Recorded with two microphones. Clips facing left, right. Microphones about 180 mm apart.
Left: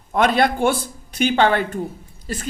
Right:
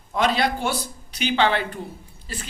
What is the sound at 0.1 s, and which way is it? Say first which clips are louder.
A man's voice: left 4 dB; 55° left (ahead or behind).